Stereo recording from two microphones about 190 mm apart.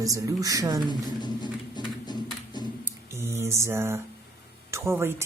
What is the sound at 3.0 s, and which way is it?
Mantra, 15° right (ahead or behind).